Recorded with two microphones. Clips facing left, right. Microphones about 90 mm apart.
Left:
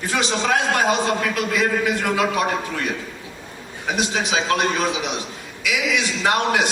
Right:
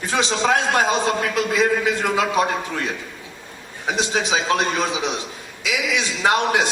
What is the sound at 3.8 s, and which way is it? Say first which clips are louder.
A man's voice: right 1 dB; 20° right (ahead or behind).